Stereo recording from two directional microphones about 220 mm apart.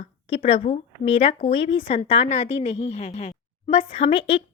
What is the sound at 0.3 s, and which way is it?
A woman's voice, 25° left (ahead or behind).